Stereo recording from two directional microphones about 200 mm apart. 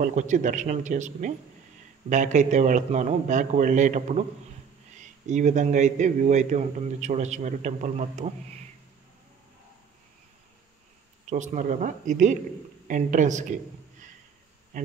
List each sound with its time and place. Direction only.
0.0 s a man's voice: 35° right (ahead or behind)
11.2 s a man's voice: 40° right (ahead or behind)